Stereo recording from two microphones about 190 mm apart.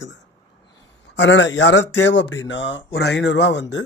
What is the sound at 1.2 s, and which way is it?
Speech, 70° left (ahead or behind).